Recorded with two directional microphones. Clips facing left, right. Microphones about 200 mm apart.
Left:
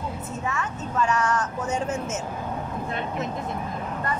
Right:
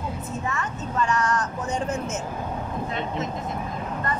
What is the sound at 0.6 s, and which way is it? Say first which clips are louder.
A woman's voice: left 2 dB; 5° left (ahead or behind).